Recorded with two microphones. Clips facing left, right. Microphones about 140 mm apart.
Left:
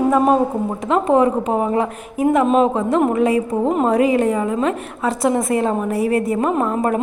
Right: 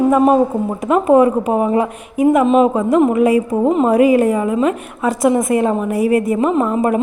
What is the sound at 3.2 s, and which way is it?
Speech, 30° left (ahead or behind).